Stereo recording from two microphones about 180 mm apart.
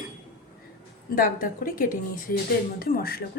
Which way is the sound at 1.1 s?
50° left (ahead or behind).